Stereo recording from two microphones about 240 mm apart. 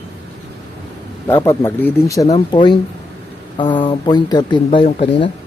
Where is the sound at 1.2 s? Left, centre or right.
Centre.